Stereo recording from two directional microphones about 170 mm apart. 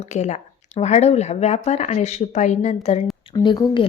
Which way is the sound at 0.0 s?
40° left (ahead or behind).